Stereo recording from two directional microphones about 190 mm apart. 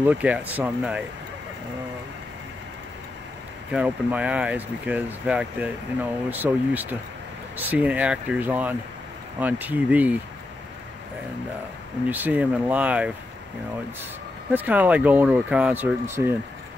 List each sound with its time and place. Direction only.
0.0 s speech: 10° right (ahead or behind)
3.7 s speech: 5° right (ahead or behind)
12.1 s speech: 10° right (ahead or behind)
14.5 s speech: 10° right (ahead or behind)